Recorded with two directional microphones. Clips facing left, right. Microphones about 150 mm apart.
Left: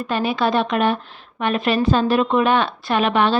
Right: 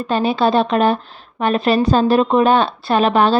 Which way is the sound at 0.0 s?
30° right (ahead or behind).